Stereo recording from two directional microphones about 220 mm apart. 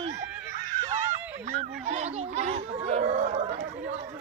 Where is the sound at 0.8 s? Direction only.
35° right (ahead or behind).